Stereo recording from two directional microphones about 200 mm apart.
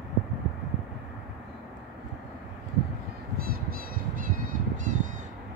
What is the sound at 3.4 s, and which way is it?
Crow, 50° right (ahead or behind).